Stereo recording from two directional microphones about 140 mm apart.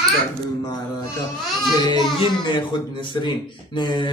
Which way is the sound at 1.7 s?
30° left (ahead or behind).